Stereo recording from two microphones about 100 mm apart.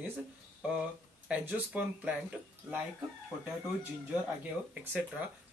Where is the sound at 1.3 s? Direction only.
15° right (ahead or behind).